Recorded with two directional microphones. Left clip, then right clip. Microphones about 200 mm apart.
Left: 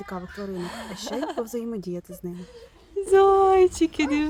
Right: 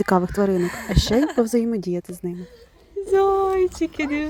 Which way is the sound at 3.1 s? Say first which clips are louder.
Left 2 dB; 15° left (ahead or behind).